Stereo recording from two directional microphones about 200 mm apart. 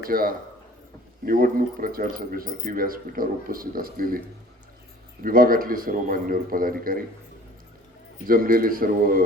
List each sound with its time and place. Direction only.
0.1 s speech: 45° right (ahead or behind)
5.2 s speech: 45° right (ahead or behind)
8.3 s speech: 45° right (ahead or behind)